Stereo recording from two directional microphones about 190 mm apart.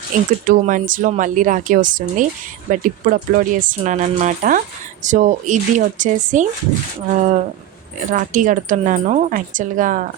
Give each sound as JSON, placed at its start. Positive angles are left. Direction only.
{"t": 0.4, "sound": "a woman's voice", "side_deg": -45}